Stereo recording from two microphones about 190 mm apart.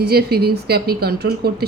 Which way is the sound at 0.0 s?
55° right (ahead or behind).